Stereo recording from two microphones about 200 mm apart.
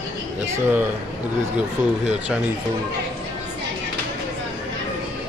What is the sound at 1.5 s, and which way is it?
Speech, 5° right (ahead or behind).